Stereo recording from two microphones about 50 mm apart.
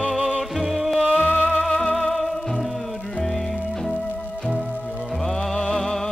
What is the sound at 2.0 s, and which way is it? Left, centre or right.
Music, centre.